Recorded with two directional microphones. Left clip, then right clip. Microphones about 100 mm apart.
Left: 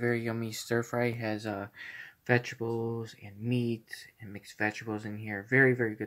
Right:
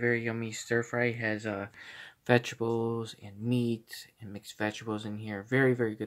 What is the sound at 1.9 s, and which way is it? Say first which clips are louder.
Speech: right 2 dB; 75° right (ahead or behind).